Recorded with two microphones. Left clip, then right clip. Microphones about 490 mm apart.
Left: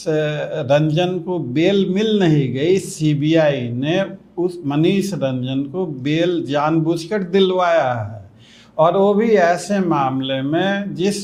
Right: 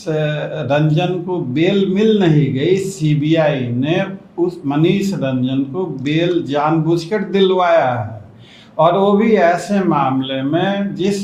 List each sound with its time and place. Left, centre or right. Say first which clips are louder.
0.1 s speech: even; left